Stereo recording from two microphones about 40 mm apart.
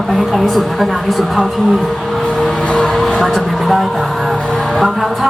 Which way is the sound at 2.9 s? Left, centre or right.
Centre.